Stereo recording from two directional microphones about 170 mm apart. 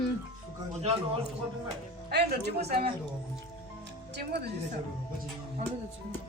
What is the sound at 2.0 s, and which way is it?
Speech, 70° right (ahead or behind).